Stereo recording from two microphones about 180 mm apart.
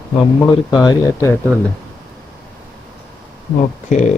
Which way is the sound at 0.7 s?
20° left (ahead or behind).